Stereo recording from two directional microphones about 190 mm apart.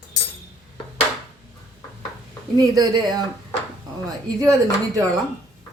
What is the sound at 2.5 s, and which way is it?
Speech, 20° right (ahead or behind).